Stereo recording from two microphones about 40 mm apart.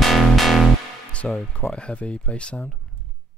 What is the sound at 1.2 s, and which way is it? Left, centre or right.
Speech, centre.